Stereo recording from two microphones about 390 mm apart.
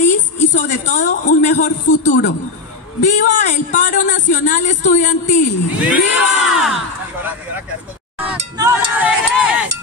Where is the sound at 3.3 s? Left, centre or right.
Centre.